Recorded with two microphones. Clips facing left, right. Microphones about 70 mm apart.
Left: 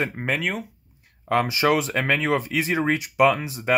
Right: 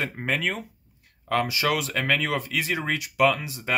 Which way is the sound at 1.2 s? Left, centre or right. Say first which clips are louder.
Left 4 dB; left.